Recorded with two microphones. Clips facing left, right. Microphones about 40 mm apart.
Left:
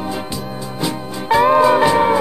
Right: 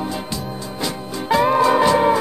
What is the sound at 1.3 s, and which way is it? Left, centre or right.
Music, centre.